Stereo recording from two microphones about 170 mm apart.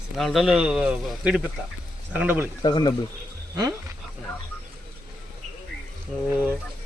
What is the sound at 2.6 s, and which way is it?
Speech, 25° left (ahead or behind).